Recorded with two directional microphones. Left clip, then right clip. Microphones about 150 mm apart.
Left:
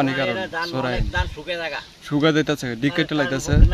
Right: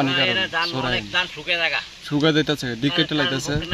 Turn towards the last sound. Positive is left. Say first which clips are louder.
# even
turn(degrees=5)  # may be behind; listen again after turning